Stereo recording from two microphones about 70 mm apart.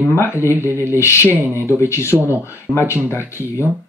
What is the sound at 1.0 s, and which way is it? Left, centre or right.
Speech, left.